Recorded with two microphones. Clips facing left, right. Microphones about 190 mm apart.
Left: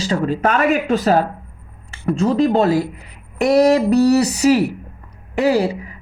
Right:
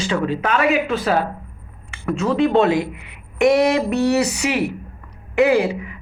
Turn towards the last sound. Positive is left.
turn(degrees=35)  # may be behind; listen again after turning